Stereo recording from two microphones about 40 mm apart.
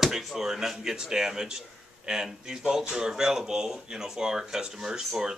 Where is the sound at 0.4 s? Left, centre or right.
Centre.